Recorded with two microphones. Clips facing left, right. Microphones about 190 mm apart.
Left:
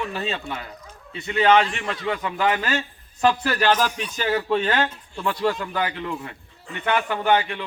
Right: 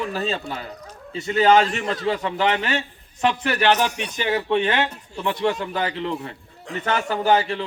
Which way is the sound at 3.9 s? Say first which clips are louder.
Right 1 dB; 70° right (ahead or behind).